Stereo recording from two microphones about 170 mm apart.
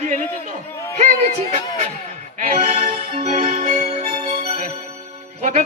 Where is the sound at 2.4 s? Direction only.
40° right (ahead or behind).